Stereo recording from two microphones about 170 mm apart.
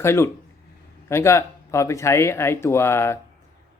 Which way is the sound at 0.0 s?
15° left (ahead or behind).